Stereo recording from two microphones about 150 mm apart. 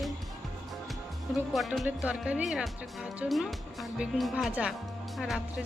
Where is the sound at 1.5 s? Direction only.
Centre (ahead or behind).